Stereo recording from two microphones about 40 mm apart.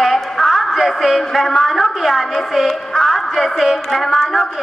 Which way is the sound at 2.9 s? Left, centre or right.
Centre.